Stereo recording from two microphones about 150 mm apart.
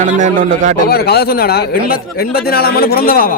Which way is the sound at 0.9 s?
90° left.